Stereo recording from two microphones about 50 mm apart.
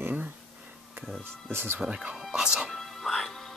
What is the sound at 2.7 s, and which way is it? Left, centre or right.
Music, centre.